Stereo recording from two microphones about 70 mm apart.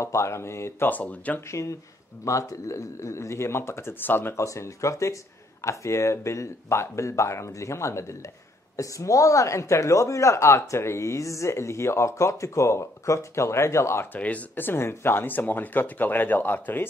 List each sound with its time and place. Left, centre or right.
0.0 s speech: left
0.8 s speech: left
1.5 s a man's voice: left
14.1 s speech: left